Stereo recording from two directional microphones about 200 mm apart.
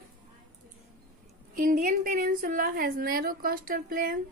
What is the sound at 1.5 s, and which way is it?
A woman's voice, 40° right (ahead or behind).